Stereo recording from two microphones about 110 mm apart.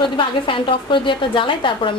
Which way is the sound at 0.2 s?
50° left (ahead or behind).